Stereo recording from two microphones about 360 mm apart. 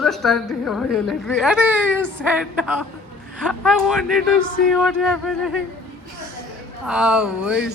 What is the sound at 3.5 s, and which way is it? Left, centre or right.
Speech, centre.